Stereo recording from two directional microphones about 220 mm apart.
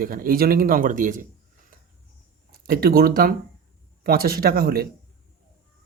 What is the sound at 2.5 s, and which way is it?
Speech, 45° right (ahead or behind).